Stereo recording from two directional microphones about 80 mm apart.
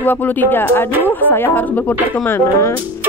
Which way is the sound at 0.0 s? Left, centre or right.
Left.